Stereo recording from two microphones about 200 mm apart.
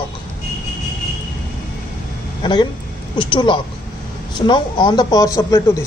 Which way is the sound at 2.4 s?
20° left (ahead or behind).